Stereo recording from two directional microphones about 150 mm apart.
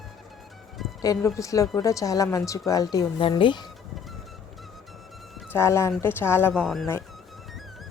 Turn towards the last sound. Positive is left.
turn(degrees=0)  # may be behind; listen again after turning